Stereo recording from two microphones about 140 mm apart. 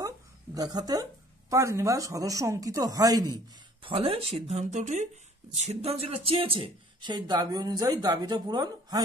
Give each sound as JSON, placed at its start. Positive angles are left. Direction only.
{"t": 0.6, "sound": "speech", "side_deg": -30}
{"t": 3.8, "sound": "speech", "side_deg": -40}